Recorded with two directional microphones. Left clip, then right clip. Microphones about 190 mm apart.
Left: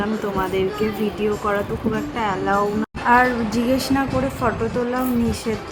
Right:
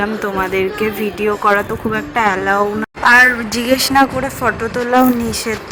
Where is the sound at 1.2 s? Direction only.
30° right (ahead or behind).